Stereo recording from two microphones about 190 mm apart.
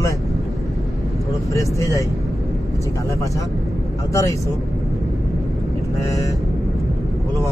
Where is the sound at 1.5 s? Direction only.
15° left (ahead or behind).